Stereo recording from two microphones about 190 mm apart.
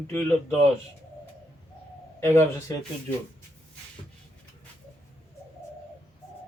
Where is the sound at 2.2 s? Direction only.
15° left (ahead or behind).